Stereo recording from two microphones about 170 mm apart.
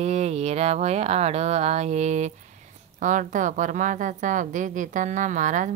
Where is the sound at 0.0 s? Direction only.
40° right (ahead or behind).